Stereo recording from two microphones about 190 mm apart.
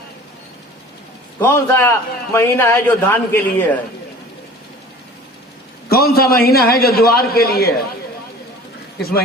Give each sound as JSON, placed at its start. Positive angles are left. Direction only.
{"t": 1.4, "sound": "a man's voice", "side_deg": 15}
{"t": 5.9, "sound": "a man's voice", "side_deg": 55}